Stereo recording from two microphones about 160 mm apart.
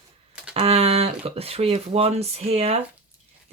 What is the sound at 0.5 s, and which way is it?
Speech, 40° right (ahead or behind).